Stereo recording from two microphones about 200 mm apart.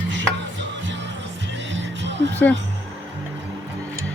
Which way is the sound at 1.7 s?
65° right (ahead or behind).